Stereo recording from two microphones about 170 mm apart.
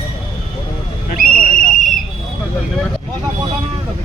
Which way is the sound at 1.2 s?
50° left (ahead or behind).